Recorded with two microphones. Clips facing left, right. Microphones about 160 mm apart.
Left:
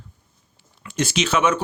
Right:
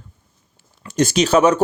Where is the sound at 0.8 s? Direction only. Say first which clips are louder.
Right 6 dB; 40° right (ahead or behind).